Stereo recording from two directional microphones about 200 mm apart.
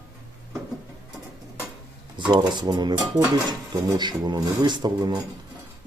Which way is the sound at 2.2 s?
20° right (ahead or behind).